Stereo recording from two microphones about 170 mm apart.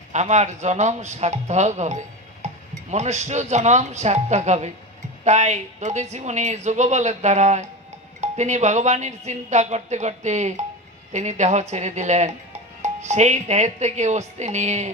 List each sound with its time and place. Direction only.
0.1 s speech: 45° right (ahead or behind)